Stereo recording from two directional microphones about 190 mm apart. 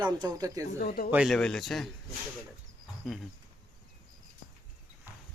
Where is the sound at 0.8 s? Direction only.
50° left (ahead or behind).